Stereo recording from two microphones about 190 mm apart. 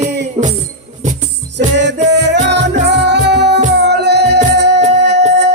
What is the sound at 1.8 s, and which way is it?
Music, 65° right (ahead or behind).